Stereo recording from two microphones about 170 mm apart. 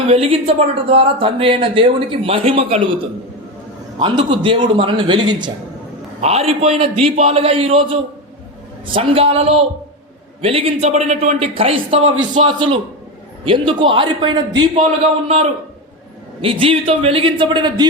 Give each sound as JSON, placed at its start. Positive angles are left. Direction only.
{"t": 0.1, "sound": "speech", "side_deg": -35}
{"t": 3.9, "sound": "a man's voice", "side_deg": -30}
{"t": 15.3, "sound": "speech", "side_deg": -35}